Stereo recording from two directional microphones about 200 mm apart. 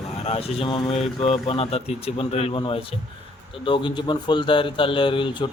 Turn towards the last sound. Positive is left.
turn(degrees=25)  # may be behind; listen again after turning